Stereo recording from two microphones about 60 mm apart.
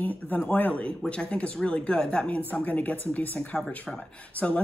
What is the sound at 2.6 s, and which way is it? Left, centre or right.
Speech, left.